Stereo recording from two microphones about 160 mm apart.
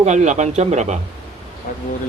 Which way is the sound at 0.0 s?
50° right (ahead or behind).